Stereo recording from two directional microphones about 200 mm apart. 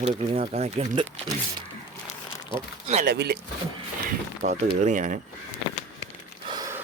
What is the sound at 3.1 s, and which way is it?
Speech, 55° right (ahead or behind).